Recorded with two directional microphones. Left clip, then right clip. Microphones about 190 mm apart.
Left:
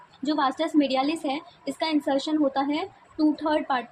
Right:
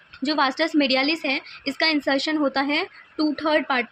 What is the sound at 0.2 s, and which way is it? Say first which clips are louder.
A woman's voice: right 3 dB; 30° right (ahead or behind).